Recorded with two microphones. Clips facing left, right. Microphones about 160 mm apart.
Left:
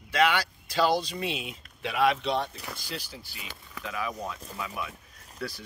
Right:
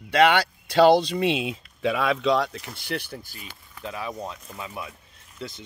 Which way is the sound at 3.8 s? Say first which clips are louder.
Right 1 dB; 30° right (ahead or behind).